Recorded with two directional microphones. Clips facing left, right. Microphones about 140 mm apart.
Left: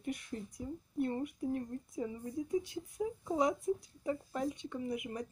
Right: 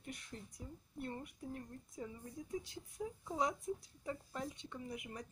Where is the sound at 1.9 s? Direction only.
15° left (ahead or behind).